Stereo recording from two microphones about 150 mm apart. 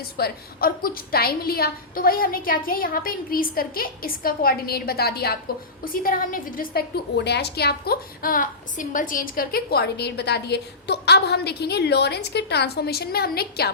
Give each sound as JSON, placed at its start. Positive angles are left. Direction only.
{"t": 0.2, "sound": "a woman's voice", "side_deg": 85}
{"t": 5.8, "sound": "a woman's voice", "side_deg": 70}